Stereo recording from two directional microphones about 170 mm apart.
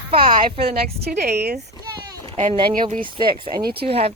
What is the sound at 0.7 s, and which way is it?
Speech, 65° right (ahead or behind).